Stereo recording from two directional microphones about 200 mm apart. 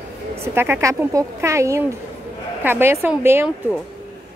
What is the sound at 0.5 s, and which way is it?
Speech, 10° right (ahead or behind).